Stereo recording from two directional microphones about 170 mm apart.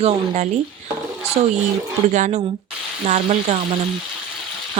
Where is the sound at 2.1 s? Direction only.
45° right (ahead or behind).